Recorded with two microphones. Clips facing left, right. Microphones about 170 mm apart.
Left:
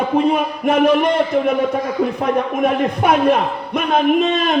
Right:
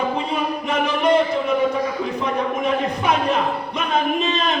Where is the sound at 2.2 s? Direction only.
55° left (ahead or behind).